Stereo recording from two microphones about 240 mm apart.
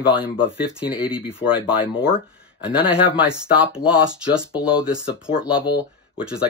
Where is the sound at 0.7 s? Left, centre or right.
Centre.